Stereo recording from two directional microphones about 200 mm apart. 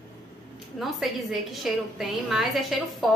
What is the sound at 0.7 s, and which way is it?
A woman's voice, centre (ahead or behind).